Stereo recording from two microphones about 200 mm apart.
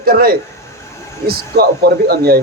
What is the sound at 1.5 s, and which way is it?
Speech, 55° right (ahead or behind).